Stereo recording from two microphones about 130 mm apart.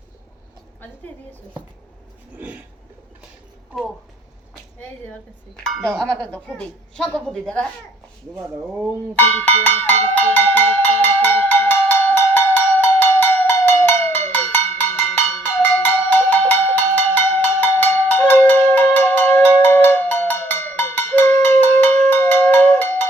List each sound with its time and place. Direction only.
0.8 s a woman's voice: 15° left (ahead or behind)
6.0 s speech: 10° left (ahead or behind)
8.6 s speech: 10° right (ahead or behind)
9.1 s speech: 15° left (ahead or behind)
10.2 s cowbell: 15° left (ahead or behind)